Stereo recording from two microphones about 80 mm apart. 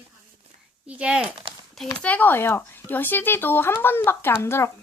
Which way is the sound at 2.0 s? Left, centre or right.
Centre.